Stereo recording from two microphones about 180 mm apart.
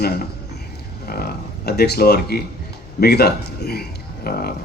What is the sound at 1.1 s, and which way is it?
Speech, 60° left (ahead or behind).